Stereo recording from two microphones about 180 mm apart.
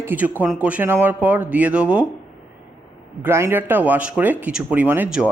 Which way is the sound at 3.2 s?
15° right (ahead or behind).